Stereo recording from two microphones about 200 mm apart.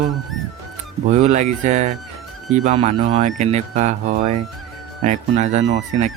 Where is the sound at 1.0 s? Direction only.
35° right (ahead or behind).